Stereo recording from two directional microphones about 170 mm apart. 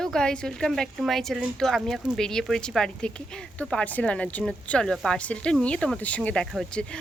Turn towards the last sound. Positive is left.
turn(degrees=5)  # may be behind; listen again after turning